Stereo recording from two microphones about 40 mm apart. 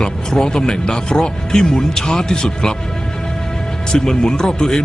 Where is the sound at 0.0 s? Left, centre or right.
Centre.